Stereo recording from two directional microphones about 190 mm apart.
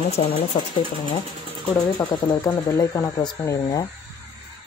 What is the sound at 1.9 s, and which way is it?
Speech, 20° left (ahead or behind).